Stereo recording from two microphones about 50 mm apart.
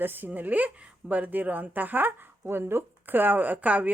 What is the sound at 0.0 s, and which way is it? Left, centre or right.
Speech, right.